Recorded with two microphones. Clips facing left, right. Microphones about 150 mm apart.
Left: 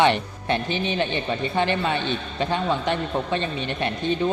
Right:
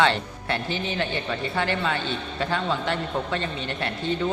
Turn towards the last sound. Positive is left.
turn(degrees=20)  # may be behind; listen again after turning